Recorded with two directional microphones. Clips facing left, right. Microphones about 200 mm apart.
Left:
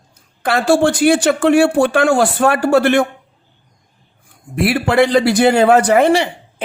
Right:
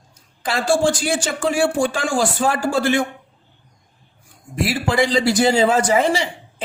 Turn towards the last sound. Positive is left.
turn(degrees=60)  # may be behind; listen again after turning